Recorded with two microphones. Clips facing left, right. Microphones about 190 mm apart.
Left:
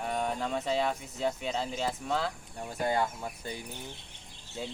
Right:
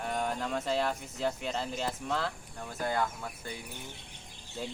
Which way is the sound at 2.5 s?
20° left (ahead or behind).